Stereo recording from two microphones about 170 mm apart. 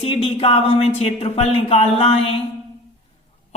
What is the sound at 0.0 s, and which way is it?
Speech, 35° left (ahead or behind).